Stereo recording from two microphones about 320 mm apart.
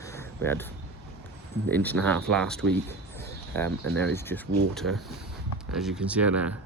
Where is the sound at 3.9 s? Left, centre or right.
Centre.